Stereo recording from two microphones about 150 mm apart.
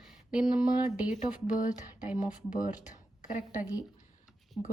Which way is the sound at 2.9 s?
55° left (ahead or behind).